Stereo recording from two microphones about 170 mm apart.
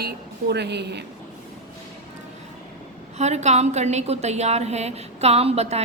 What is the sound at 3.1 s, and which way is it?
A woman's voice, 40° right (ahead or behind).